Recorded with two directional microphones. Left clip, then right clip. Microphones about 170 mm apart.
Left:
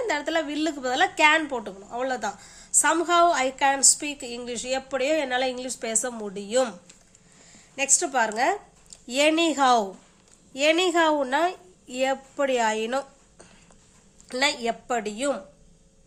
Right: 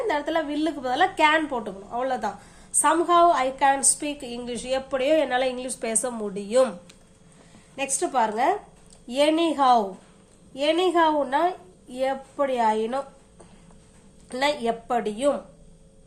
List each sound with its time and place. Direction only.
0.1 s a woman's voice: 35° left (ahead or behind); by 6.7 s 15° left (ahead or behind)
7.8 s a woman's voice: 30° left (ahead or behind)